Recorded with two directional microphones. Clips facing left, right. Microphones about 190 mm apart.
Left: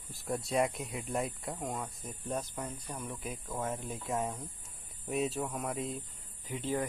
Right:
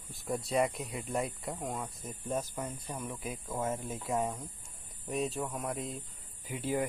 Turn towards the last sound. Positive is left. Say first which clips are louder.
# right 1 dB
turn(degrees=-10)  # may be behind; listen again after turning